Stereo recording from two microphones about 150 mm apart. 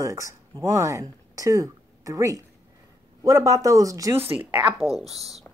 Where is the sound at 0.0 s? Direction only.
20° right (ahead or behind).